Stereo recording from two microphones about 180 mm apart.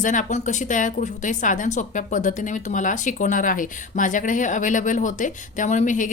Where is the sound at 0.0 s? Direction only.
45° left (ahead or behind).